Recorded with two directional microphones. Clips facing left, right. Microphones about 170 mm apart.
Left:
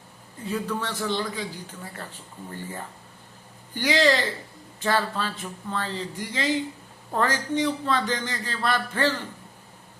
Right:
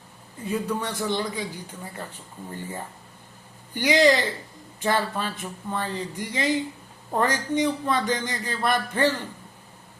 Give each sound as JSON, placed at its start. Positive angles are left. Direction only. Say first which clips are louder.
{"t": 0.7, "sound": "a man's voice", "louder": "right 1 dB", "side_deg": -15}
{"t": 3.8, "sound": "a man's voice", "louder": "right 2 dB", "side_deg": -15}